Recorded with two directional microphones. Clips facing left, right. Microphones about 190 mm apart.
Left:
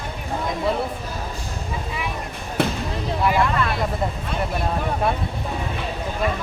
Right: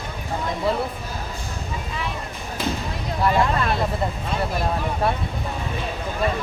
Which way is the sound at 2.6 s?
70° left (ahead or behind).